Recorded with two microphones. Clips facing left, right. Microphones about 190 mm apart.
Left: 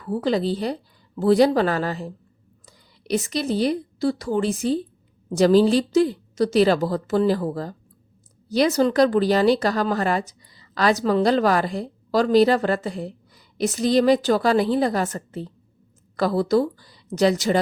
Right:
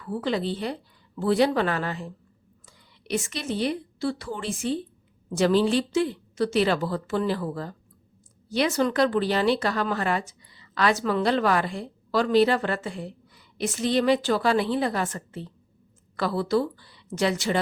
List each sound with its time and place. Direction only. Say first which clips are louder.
0.0 s a woman's voice: left 5 dB; 40° left (ahead or behind)